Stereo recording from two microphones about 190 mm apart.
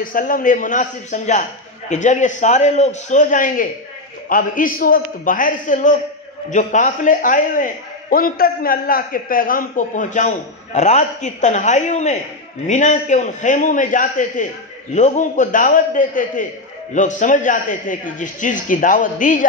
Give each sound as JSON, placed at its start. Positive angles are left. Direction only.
{"t": 0.0, "sound": "a man's voice", "side_deg": 45}